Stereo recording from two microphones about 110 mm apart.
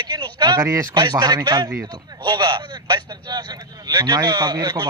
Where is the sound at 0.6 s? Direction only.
25° right (ahead or behind).